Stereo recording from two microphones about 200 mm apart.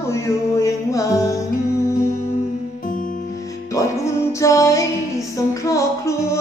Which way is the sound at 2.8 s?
40° left (ahead or behind).